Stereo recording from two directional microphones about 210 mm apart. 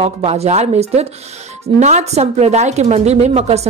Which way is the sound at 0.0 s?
30° right (ahead or behind).